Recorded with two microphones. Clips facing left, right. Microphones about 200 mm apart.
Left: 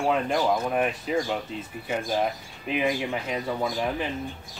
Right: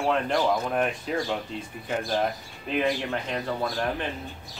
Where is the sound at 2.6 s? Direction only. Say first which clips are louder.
Even; 5° left (ahead or behind).